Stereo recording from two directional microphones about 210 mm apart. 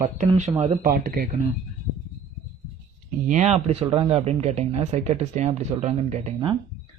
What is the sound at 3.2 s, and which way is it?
Speech, 35° right (ahead or behind).